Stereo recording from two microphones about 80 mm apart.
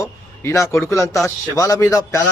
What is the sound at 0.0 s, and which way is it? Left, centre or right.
A man's voice, left.